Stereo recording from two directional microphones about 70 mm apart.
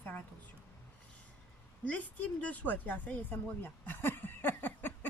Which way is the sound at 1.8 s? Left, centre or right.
Left.